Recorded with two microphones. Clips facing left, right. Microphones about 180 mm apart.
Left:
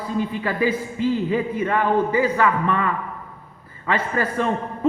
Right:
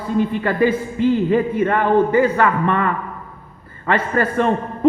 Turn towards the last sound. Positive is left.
turn(degrees=-60)  # may be behind; listen again after turning